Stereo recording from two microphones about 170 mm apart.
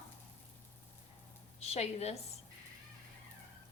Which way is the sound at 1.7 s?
40° left (ahead or behind).